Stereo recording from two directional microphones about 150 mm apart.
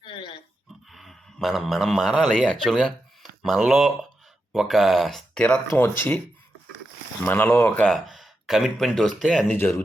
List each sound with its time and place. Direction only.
0.0 s pig: 35° left (ahead or behind)
0.9 s a man's voice: centre (ahead or behind)
7.3 s speech: 15° left (ahead or behind)